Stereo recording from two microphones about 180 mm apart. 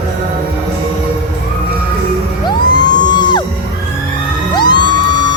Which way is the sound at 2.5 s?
25° left (ahead or behind).